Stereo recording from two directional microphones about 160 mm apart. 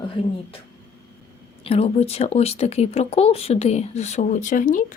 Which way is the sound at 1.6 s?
40° left (ahead or behind).